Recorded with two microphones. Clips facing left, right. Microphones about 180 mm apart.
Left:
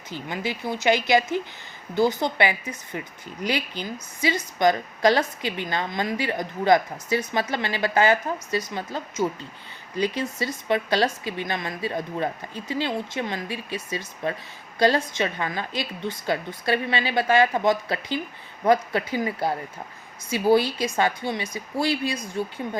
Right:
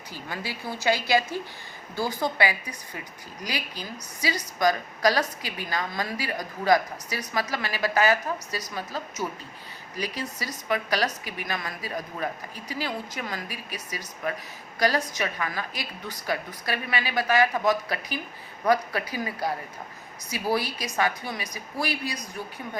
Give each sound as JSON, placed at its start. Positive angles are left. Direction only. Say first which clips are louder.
{"t": 0.1, "sound": "a woman's voice", "louder": "left 6 dB", "side_deg": 20}